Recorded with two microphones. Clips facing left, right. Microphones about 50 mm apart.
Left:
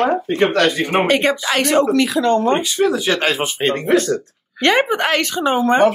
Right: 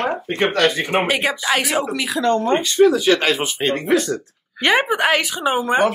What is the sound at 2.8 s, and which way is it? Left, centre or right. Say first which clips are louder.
Speech: right 3 dB; left.